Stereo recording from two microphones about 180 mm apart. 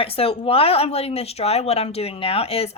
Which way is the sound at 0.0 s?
30° left (ahead or behind).